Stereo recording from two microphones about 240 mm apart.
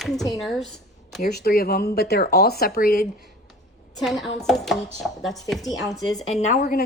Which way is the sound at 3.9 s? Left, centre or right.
Centre.